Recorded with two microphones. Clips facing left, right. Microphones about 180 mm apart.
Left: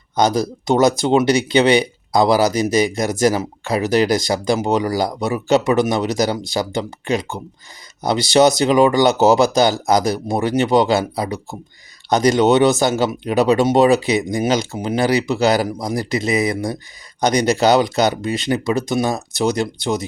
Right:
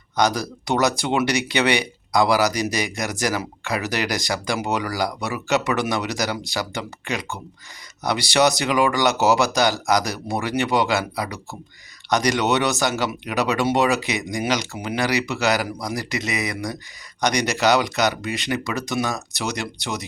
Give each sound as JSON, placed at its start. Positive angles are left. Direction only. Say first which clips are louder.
{"t": 0.2, "sound": "speech", "louder": "left 4 dB", "side_deg": 25}